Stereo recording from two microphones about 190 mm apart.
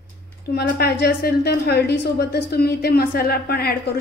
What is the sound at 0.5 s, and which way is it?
A woman's voice, 55° left (ahead or behind).